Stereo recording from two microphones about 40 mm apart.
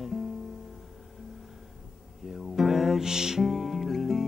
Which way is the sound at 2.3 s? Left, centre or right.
Centre.